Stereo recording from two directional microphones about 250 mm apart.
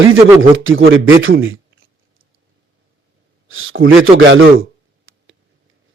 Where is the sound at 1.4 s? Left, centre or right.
Right.